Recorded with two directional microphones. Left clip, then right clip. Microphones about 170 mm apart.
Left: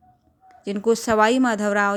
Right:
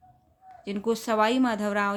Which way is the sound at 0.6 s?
30° left (ahead or behind).